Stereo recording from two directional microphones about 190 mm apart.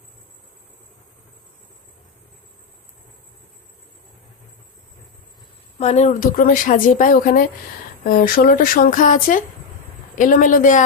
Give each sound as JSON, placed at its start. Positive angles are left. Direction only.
{"t": 5.8, "sound": "speech", "side_deg": 35}